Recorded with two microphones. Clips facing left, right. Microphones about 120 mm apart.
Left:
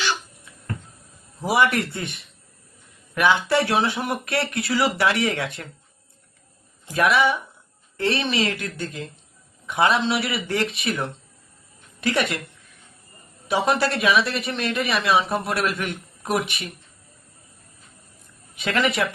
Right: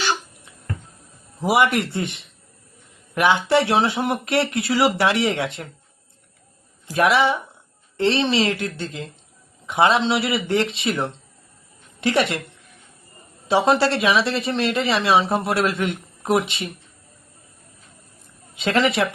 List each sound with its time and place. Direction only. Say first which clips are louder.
1.4 s speech: right 2 dB; 25° right (ahead or behind)
6.9 s a woman's voice: right 2 dB; 25° right (ahead or behind)
18.6 s speech: right 3 dB; 25° right (ahead or behind)